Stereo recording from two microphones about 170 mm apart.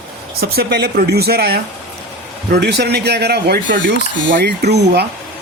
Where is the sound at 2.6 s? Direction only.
75° right (ahead or behind).